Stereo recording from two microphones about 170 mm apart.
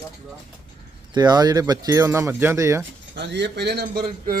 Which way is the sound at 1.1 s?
25° right (ahead or behind).